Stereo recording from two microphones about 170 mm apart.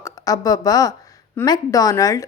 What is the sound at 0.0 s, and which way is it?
Speech, 20° left (ahead or behind).